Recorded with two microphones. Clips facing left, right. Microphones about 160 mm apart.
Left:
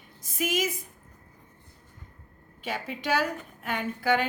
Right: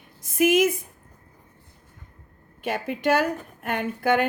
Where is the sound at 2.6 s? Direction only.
55° right (ahead or behind).